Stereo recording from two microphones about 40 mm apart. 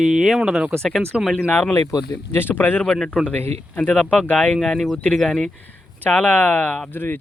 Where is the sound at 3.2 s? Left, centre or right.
Left.